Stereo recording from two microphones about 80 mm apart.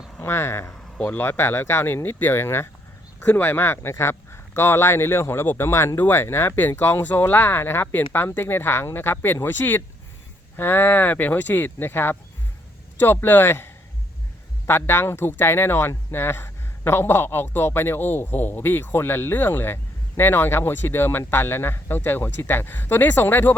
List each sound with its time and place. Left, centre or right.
0.2 s speech: left
14.7 s speech: left